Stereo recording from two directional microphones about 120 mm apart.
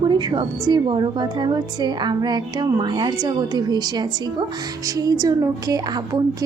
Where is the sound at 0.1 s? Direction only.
35° right (ahead or behind).